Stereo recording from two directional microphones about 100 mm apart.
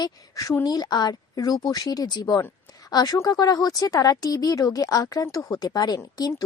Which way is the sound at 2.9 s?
40° left (ahead or behind).